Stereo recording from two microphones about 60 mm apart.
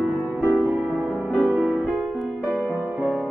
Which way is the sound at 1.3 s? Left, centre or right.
Centre.